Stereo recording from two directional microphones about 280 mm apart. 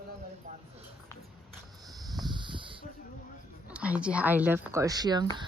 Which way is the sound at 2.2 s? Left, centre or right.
Centre.